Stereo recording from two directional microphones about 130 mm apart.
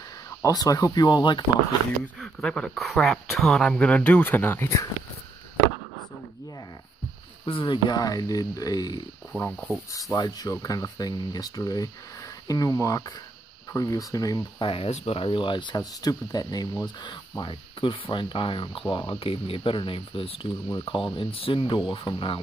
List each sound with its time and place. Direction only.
0.3 s speech: 25° left (ahead or behind)
2.1 s speech: 5° left (ahead or behind)
7.4 s speech: 40° left (ahead or behind)
9.4 s speech: 10° left (ahead or behind)
10.1 s speech: 30° left (ahead or behind)
14.6 s speech: 45° left (ahead or behind)